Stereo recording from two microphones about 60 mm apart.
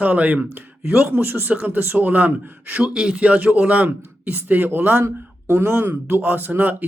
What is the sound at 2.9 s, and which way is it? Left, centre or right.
Speech, centre.